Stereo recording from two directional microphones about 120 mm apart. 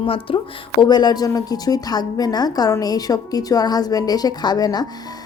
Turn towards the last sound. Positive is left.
turn(degrees=35)  # may be behind; listen again after turning